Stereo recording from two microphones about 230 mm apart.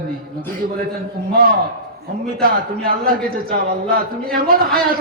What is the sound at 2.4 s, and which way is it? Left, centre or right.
Speech, right.